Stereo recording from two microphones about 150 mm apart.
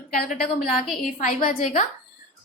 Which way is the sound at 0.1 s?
70° left (ahead or behind).